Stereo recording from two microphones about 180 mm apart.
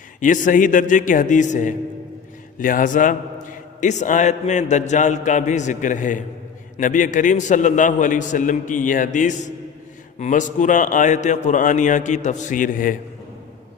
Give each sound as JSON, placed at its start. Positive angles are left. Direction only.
{"t": 0.2, "sound": "a man's voice", "side_deg": 45}